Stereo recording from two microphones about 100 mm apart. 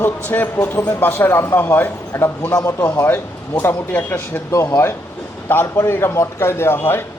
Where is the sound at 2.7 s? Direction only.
20° left (ahead or behind).